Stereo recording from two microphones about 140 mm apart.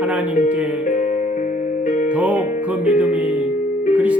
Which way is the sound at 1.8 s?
65° left (ahead or behind).